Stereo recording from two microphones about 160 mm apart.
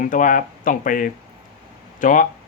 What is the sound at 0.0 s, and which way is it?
Speech, 55° left (ahead or behind).